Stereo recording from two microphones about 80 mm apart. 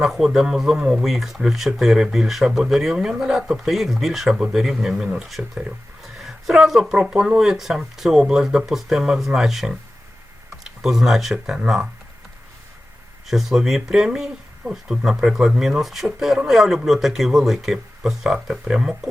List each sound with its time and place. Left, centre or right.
0.0 s speech: centre
13.2 s speech: centre